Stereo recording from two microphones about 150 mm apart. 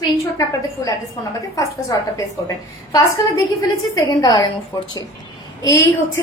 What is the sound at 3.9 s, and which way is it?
Speech, 25° left (ahead or behind).